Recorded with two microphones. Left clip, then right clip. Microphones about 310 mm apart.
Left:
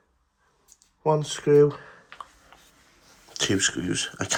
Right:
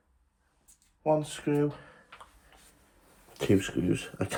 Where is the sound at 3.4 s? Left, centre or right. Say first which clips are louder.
Left 2 dB; centre.